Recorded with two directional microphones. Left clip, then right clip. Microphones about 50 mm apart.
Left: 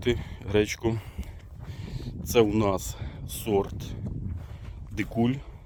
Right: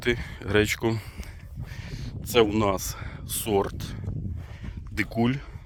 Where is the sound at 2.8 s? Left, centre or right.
Left.